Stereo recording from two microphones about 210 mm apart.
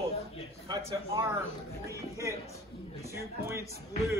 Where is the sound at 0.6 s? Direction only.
20° right (ahead or behind).